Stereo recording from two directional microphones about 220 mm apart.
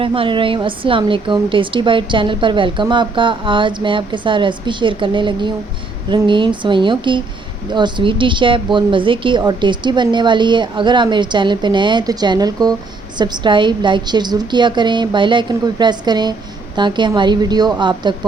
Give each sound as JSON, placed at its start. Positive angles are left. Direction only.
{"t": 0.0, "sound": "a woman's voice", "side_deg": -25}